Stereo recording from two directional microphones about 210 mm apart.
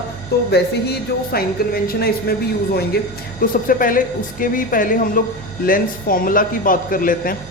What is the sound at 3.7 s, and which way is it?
A man's voice, 40° left (ahead or behind).